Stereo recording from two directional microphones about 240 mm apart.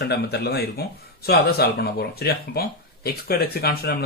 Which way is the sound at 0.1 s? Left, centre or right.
Left.